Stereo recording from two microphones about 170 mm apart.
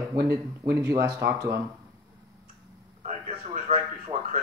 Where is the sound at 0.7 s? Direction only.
15° right (ahead or behind).